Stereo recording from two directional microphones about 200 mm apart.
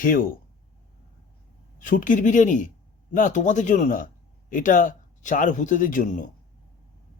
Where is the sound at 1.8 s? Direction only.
40° left (ahead or behind).